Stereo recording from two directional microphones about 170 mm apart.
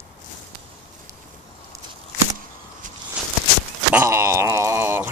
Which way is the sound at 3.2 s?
5° right (ahead or behind).